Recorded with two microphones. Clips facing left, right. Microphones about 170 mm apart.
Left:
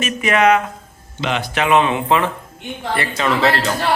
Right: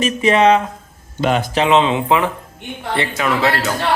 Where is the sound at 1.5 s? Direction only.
25° right (ahead or behind).